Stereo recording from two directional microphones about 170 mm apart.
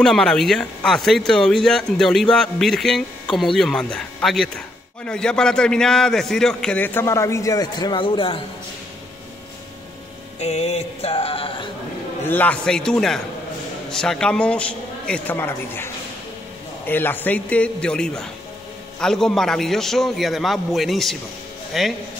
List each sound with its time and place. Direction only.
0.0 s speech: 5° left (ahead or behind); by 8.4 s 30° left (ahead or behind)
10.4 s a sound: 35° left (ahead or behind)
12.3 s a man's voice: 10° left (ahead or behind)